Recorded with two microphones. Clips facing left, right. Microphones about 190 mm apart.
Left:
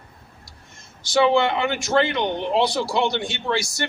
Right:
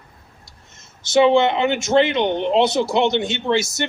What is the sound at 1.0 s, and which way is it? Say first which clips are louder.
A man's voice: right 4 dB; 20° right (ahead or behind).